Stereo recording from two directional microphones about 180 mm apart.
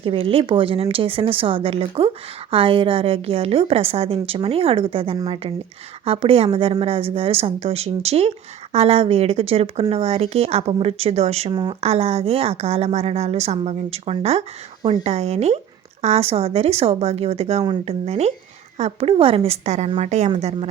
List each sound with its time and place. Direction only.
0.0 s a woman's voice: 30° right (ahead or behind)